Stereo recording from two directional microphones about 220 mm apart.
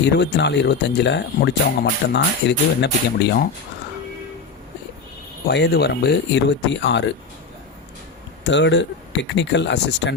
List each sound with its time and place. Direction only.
0.0 s speech: 50° left (ahead or behind)
5.5 s speech: 50° left (ahead or behind)
8.4 s speech: 55° left (ahead or behind)